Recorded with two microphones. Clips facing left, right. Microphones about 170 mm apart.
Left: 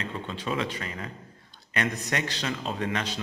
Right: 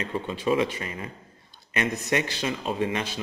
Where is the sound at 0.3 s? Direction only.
15° right (ahead or behind).